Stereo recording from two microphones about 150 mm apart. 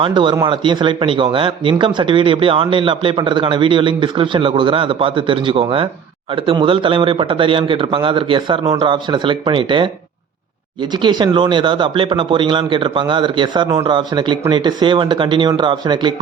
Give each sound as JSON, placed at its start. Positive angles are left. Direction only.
{"t": 0.0, "sound": "speech", "side_deg": -30}
{"t": 10.9, "sound": "speech", "side_deg": -30}